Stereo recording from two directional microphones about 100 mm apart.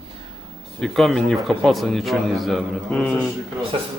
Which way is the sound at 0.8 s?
5° left (ahead or behind).